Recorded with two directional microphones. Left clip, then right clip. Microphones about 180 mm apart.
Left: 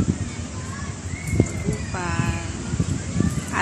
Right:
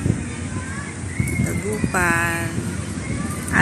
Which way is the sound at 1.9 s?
20° right (ahead or behind).